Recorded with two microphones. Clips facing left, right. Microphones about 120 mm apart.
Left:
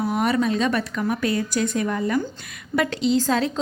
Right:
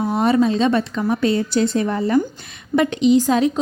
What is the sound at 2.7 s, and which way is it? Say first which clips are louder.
Speech: right 6 dB; 20° right (ahead or behind).